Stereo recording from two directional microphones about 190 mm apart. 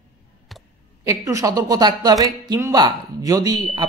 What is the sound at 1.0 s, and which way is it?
A man's voice, 15° right (ahead or behind).